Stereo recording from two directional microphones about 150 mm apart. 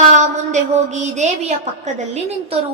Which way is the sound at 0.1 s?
50° right (ahead or behind).